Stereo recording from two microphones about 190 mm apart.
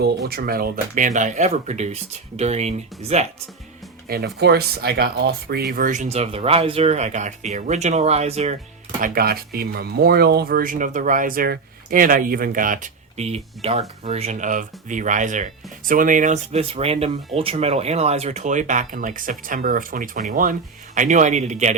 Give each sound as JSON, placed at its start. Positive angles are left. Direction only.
{"t": 0.3, "sound": "speech", "side_deg": -55}
{"t": 4.1, "sound": "speech", "side_deg": -60}
{"t": 9.0, "sound": "speech", "side_deg": -50}